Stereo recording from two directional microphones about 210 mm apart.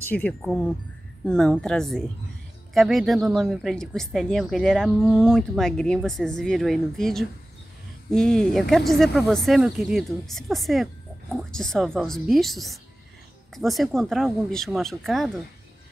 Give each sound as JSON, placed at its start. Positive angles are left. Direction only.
{"t": 0.0, "sound": "speech", "side_deg": 5}